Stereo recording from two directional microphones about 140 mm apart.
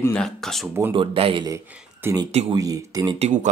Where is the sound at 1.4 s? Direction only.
20° right (ahead or behind).